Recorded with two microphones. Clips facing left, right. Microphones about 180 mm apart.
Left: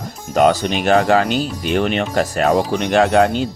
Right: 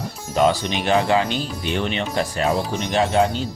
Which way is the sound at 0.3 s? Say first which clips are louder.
Left 4 dB; 45° left (ahead or behind).